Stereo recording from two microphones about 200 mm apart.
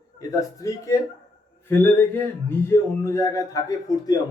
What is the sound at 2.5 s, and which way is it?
A man's voice, 10° left (ahead or behind).